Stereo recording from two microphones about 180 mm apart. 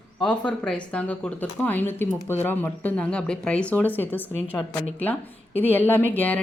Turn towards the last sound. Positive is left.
turn(degrees=10)  # may be behind; listen again after turning